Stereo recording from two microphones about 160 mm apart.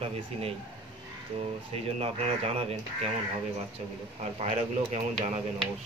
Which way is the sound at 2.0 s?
40° right (ahead or behind).